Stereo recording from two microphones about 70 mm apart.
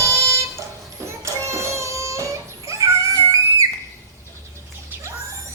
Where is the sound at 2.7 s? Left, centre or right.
Right.